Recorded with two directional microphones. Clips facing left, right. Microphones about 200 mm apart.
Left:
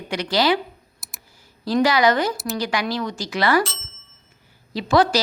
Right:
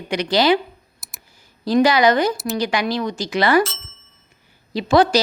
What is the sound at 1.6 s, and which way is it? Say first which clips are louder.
A woman's voice: right 3 dB; 20° right (ahead or behind).